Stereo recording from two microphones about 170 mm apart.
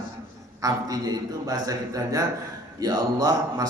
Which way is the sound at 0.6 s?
20° right (ahead or behind).